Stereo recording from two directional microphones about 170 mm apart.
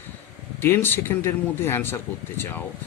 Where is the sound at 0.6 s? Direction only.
15° left (ahead or behind).